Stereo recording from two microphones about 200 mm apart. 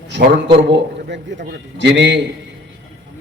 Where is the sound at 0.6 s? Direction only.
60° right (ahead or behind).